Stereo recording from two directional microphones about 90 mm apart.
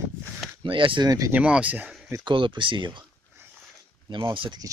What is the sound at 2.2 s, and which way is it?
Speech, 65° right (ahead or behind).